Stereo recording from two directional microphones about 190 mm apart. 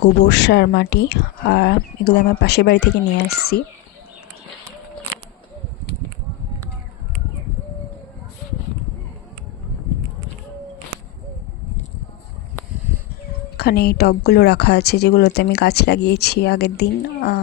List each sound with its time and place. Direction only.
0.2 s a woman's voice: 65° left (ahead or behind)
13.6 s a woman's voice: 55° left (ahead or behind)